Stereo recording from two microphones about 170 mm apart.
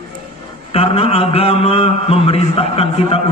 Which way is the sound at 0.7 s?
35° left (ahead or behind).